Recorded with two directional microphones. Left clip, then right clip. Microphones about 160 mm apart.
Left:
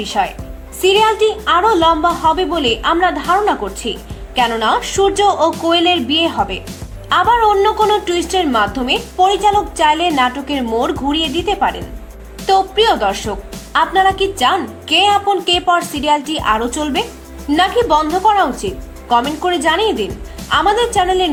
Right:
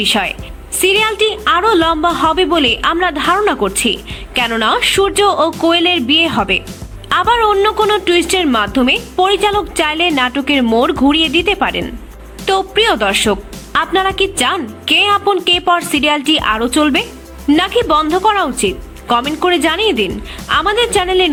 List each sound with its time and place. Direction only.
0.0 s a woman's voice: 15° right (ahead or behind)